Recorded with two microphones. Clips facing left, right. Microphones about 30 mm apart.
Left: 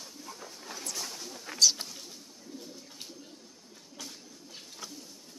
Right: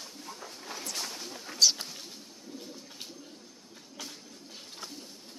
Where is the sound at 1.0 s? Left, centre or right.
Right.